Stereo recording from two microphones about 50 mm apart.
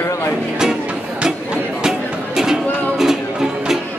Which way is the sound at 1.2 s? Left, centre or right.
Centre.